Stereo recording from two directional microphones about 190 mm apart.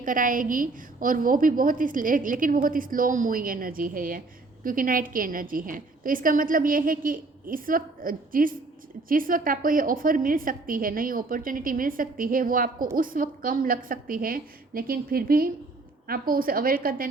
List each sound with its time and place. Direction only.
0.0 s a woman's voice: 45° right (ahead or behind)